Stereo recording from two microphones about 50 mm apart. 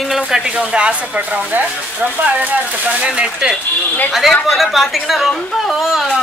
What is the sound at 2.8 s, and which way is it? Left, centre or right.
Speech, right.